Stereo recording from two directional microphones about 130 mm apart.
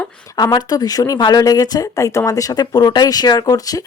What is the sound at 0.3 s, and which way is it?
Speech, 30° left (ahead or behind).